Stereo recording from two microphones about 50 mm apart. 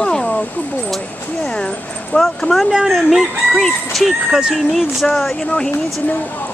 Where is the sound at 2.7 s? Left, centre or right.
Centre.